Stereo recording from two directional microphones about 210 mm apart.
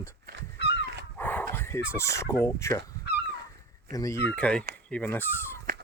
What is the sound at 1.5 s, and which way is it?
Speech, 10° left (ahead or behind).